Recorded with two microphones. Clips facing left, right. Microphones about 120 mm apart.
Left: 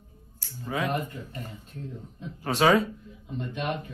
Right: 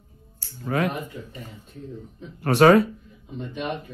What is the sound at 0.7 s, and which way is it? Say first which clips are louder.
Speech: right 6 dB; 60° right (ahead or behind).